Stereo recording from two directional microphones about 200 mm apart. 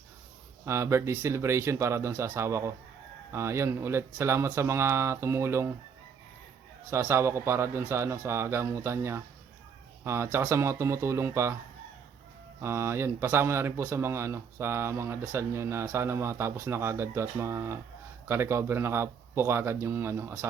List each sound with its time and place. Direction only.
0.6 s speech: 15° right (ahead or behind)
6.9 s speech: 10° right (ahead or behind)
12.5 s speech: 15° right (ahead or behind)